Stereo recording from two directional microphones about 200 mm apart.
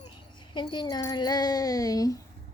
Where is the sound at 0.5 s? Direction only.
20° left (ahead or behind).